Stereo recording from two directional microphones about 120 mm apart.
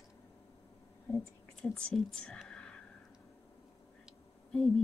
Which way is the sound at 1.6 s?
5° left (ahead or behind).